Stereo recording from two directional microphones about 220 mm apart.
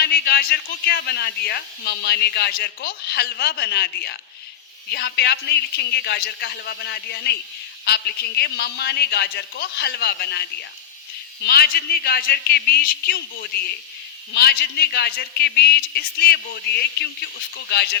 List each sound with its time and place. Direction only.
0.0 s speech: 45° left (ahead or behind)
11.4 s speech: 45° left (ahead or behind)